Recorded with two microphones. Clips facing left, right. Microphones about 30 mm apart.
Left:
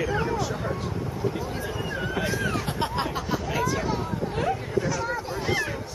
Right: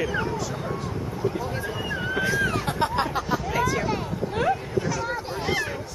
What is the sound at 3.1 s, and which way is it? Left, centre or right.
Hubbub, centre.